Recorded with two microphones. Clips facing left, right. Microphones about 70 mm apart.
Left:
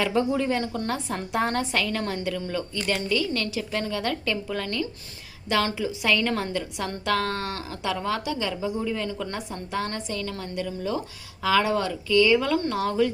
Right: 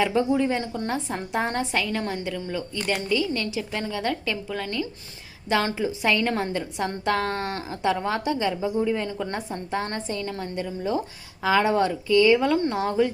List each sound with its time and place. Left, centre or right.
0.1 s a woman's voice: centre
5.5 s a woman's voice: right